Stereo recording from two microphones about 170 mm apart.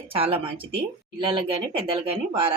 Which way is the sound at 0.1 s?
35° right (ahead or behind).